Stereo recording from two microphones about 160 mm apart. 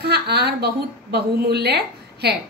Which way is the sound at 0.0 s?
90° right.